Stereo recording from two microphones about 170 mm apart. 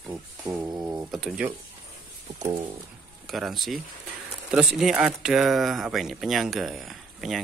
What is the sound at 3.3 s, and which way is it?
Speech, centre (ahead or behind).